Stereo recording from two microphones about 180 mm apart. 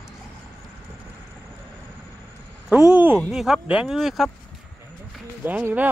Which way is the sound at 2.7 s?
10° right (ahead or behind).